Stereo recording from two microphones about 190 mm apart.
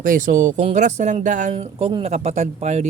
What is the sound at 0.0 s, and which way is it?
Speech, 45° right (ahead or behind).